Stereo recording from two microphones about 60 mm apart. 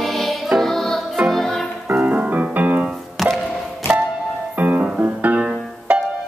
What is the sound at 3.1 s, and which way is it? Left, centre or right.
Music, centre.